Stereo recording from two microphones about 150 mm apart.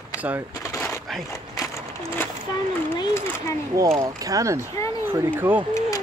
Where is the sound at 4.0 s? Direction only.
20° right (ahead or behind).